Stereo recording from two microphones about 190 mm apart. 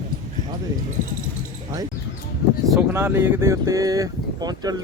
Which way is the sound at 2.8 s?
10° right (ahead or behind).